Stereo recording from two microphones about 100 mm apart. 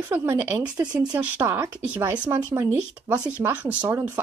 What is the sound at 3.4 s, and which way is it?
Speech, 15° right (ahead or behind).